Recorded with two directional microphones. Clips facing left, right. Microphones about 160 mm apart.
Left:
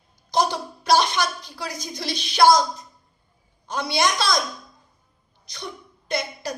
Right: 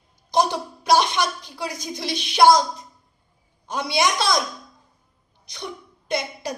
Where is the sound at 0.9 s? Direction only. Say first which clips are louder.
Right 1 dB; 20° right (ahead or behind).